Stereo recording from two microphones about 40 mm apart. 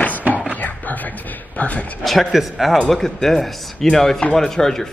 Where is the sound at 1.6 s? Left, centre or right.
Left.